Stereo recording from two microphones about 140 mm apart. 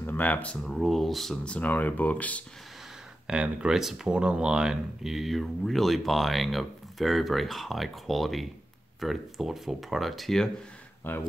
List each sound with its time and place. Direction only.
0.0 s speech: 15° left (ahead or behind)
3.3 s speech: 5° right (ahead or behind)
11.1 s speech: 15° left (ahead or behind)